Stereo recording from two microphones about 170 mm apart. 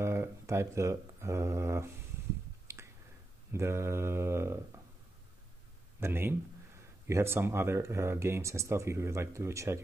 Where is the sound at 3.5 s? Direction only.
15° right (ahead or behind).